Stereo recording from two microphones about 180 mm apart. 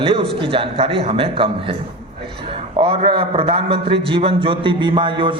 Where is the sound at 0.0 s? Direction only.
30° right (ahead or behind).